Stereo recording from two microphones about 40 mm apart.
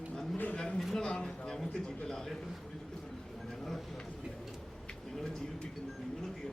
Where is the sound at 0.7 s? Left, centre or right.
Centre.